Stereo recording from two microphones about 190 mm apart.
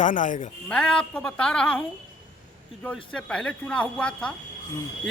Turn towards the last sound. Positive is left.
turn(degrees=5)  # may be behind; listen again after turning